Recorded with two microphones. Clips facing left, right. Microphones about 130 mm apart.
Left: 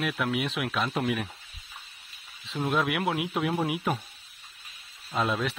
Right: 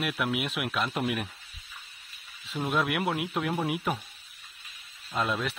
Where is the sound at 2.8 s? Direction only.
Centre (ahead or behind).